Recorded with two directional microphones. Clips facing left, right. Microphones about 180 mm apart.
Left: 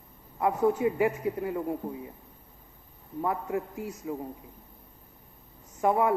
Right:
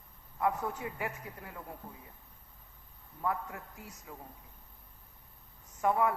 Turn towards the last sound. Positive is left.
turn(degrees=20)  # may be behind; listen again after turning